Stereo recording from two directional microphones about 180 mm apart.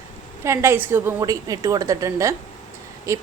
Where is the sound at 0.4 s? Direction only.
15° right (ahead or behind).